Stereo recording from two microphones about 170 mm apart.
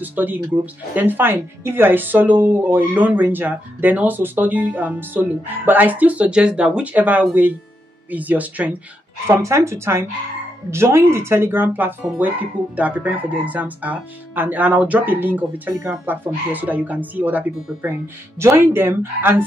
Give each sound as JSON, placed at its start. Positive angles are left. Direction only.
{"t": 0.0, "sound": "speech", "side_deg": -10}